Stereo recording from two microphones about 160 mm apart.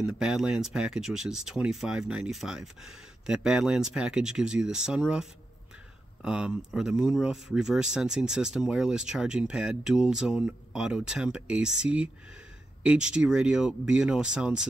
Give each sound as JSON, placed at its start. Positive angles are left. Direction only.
{"t": 0.0, "sound": "speech", "side_deg": -5}